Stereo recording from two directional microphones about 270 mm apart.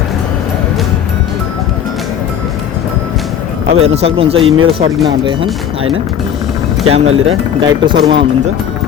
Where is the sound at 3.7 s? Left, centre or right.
Right.